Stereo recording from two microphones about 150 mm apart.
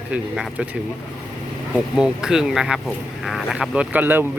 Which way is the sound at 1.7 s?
5° right (ahead or behind).